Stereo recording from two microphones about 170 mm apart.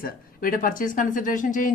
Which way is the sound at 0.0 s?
55° left (ahead or behind).